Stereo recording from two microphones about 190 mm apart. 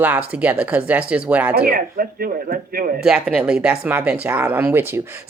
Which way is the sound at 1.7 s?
50° right (ahead or behind).